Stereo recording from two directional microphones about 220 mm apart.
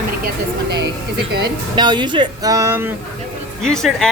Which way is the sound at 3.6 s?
Centre (ahead or behind).